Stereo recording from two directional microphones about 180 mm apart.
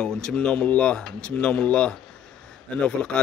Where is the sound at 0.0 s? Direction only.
5° left (ahead or behind).